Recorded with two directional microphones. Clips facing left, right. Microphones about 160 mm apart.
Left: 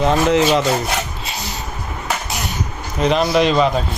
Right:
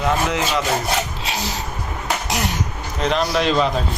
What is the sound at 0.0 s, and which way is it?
Rub, 30° left (ahead or behind).